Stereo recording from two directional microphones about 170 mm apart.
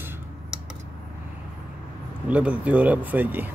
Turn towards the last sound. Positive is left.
turn(degrees=-10)  # may be behind; listen again after turning